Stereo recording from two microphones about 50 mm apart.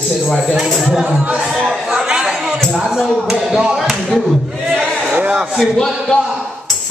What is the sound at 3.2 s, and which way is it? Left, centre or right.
Speech, centre.